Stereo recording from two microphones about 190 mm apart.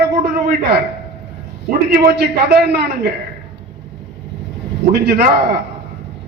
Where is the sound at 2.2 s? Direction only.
60° right (ahead or behind).